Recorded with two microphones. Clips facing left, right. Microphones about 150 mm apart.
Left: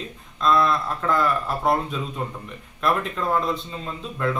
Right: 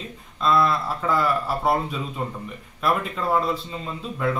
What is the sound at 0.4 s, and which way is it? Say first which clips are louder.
Speech: even; 5° right (ahead or behind).